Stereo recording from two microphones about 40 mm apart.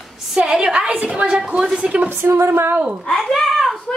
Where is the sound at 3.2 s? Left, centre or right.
Centre.